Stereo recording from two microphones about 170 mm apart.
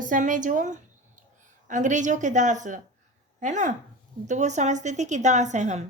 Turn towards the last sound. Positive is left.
turn(degrees=-45)  # may be behind; listen again after turning